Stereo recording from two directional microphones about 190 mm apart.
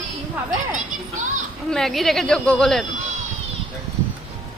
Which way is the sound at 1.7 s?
Centre (ahead or behind).